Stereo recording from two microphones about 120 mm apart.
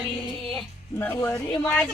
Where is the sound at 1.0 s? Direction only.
15° left (ahead or behind).